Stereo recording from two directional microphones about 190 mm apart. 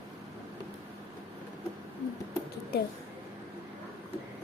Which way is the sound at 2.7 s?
55° left (ahead or behind).